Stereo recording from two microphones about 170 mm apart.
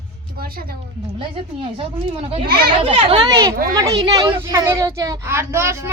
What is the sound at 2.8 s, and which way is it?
Speech, 35° right (ahead or behind).